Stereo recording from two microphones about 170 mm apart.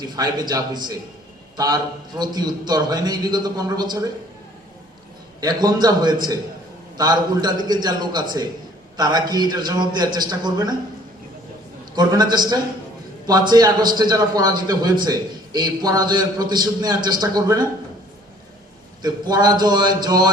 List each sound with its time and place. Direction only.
0.0 s a man's voice: 25° right (ahead or behind)
5.4 s a man's voice: 20° right (ahead or behind)
11.9 s a man's voice: 25° right (ahead or behind)
19.0 s a man's voice: 25° right (ahead or behind)